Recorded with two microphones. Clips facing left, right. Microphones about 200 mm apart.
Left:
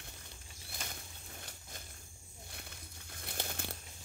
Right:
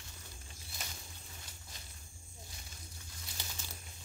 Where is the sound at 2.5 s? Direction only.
60° left (ahead or behind).